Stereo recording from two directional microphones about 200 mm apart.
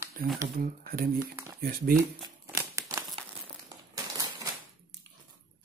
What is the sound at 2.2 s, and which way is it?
Crumpling, 15° right (ahead or behind).